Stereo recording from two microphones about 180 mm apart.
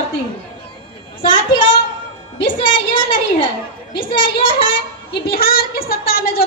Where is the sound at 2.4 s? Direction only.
30° left (ahead or behind).